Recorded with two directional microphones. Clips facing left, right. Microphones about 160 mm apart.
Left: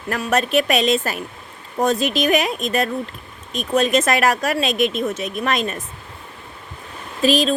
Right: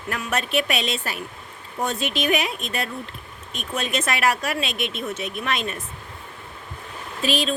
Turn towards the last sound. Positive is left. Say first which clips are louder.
# left 7 dB
turn(degrees=40)  # may be behind; listen again after turning